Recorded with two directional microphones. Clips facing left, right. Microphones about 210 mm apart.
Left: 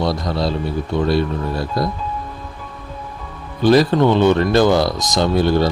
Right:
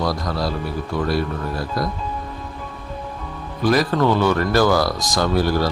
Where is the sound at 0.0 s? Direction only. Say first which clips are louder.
Left 3 dB; 25° left (ahead or behind).